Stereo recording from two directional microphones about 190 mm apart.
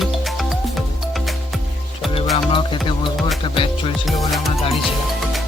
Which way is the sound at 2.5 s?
25° left (ahead or behind).